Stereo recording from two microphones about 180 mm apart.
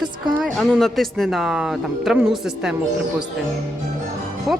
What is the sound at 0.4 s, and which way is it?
Speech, centre (ahead or behind).